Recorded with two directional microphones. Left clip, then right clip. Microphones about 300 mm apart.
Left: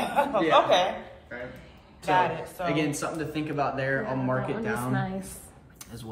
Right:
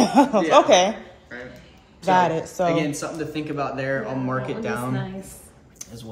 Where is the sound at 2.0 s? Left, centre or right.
Right.